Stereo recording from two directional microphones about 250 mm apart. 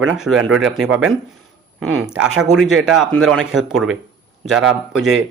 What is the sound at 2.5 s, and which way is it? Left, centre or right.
Speech, centre.